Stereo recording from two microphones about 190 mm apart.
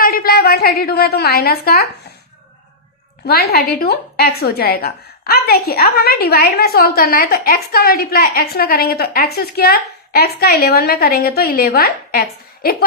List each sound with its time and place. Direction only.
0.0 s a woman's voice: 50° left (ahead or behind)
3.2 s a woman's voice: 55° left (ahead or behind)